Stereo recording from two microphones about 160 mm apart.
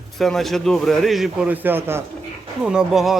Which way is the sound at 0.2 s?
Centre (ahead or behind).